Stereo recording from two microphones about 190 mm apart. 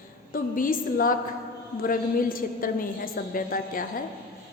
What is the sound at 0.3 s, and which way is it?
A woman's voice, 45° left (ahead or behind).